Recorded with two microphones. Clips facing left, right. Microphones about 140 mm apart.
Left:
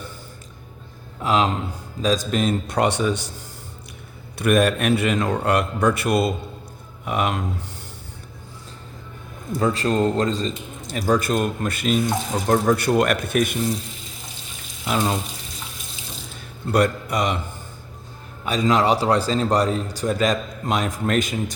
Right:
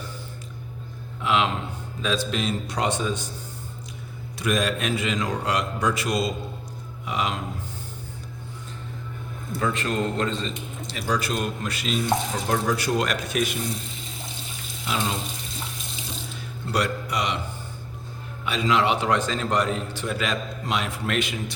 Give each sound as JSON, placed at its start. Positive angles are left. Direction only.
{"t": 1.2, "sound": "a man's voice", "side_deg": 40}
{"t": 4.4, "sound": "a man's voice", "side_deg": 60}
{"t": 9.6, "sound": "a man's voice", "side_deg": 35}
{"t": 14.8, "sound": "speech", "side_deg": 45}
{"t": 16.7, "sound": "a man's voice", "side_deg": 50}
{"t": 18.4, "sound": "a man's voice", "side_deg": 40}